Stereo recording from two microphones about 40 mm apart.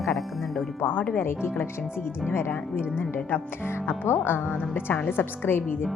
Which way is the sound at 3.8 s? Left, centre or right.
Left.